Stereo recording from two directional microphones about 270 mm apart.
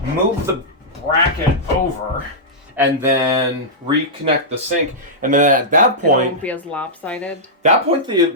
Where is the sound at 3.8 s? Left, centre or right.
Right.